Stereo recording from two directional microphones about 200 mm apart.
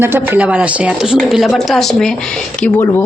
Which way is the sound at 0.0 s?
10° right (ahead or behind).